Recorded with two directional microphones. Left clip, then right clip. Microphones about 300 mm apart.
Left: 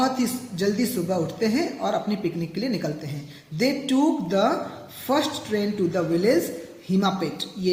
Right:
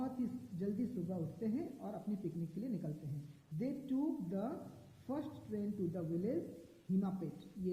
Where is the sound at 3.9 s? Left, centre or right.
Centre.